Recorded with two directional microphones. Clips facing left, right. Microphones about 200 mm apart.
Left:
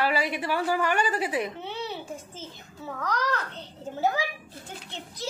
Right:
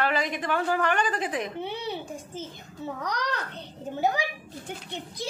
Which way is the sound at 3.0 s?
15° right (ahead or behind).